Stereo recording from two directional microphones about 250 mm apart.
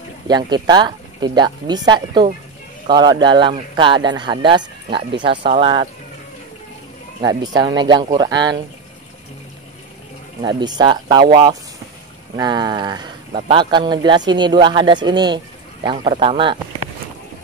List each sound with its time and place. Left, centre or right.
0.3 s speech: centre
7.2 s speech: centre
10.4 s speech: centre